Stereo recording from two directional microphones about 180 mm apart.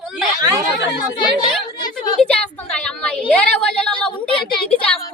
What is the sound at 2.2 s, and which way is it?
A woman's voice, 5° left (ahead or behind).